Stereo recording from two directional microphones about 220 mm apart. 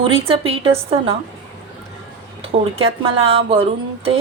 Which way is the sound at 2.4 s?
25° right (ahead or behind).